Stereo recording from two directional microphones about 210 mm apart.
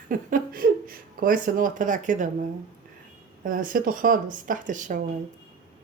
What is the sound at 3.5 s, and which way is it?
A woman's voice, 40° right (ahead or behind).